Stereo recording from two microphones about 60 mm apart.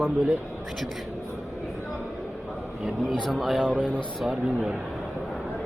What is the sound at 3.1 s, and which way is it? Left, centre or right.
Speech, centre.